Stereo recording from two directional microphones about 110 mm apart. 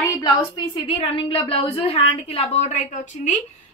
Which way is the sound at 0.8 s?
60° left (ahead or behind).